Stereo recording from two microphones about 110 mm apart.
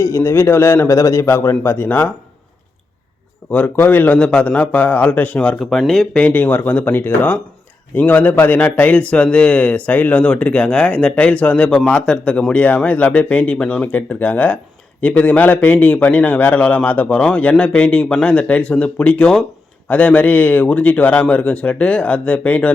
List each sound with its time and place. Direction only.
0.0 s a man's voice: 25° left (ahead or behind)
3.5 s a man's voice: 15° left (ahead or behind)
6.2 s a man's voice: 15° left (ahead or behind)